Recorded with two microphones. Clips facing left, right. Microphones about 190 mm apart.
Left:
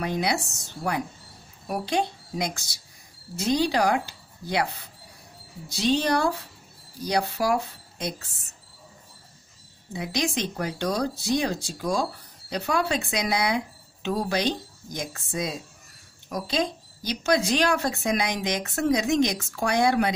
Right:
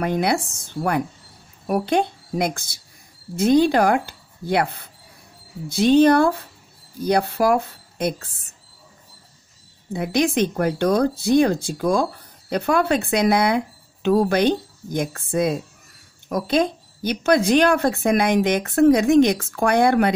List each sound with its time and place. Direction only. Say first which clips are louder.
0.0 s speech: right 5 dB; 55° right (ahead or behind)
9.9 s speech: right 8 dB; 55° right (ahead or behind)